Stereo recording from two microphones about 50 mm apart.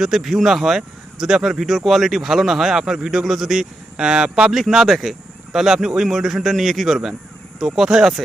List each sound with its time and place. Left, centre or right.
0.0 s speech: centre
4.5 s speech: centre